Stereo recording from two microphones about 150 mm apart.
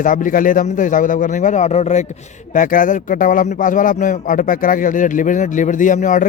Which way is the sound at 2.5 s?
65° left (ahead or behind).